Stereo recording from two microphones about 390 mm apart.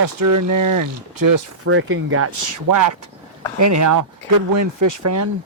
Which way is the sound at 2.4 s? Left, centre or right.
Right.